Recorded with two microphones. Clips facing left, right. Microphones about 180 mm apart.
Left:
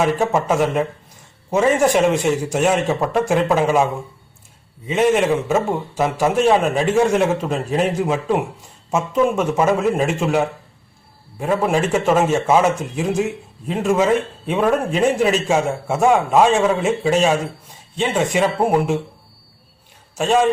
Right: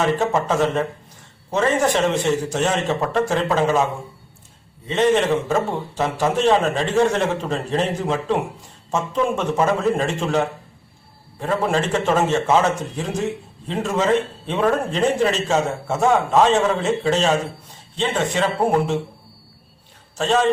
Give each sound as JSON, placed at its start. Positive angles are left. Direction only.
{"t": 0.0, "sound": "a man's voice", "side_deg": 10}
{"t": 4.9, "sound": "a man's voice", "side_deg": 10}
{"t": 20.1, "sound": "a man's voice", "side_deg": 10}